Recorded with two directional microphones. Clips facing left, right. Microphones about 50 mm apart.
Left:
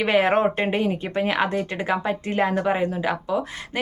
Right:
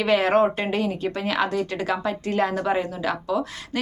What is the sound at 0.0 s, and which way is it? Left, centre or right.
Speech, left.